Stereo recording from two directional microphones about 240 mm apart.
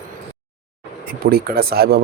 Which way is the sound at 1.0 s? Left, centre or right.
Right.